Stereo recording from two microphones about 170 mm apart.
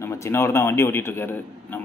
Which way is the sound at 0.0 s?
15° left (ahead or behind).